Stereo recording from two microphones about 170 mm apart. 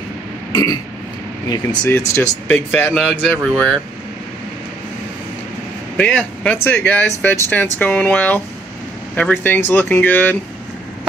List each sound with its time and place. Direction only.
0.5 s burping: 25° left (ahead or behind)
1.5 s speech: 25° left (ahead or behind); by 3.7 s 5° left (ahead or behind)
5.9 s speech: 10° left (ahead or behind)